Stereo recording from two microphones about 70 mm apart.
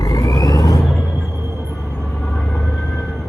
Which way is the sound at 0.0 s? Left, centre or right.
Left.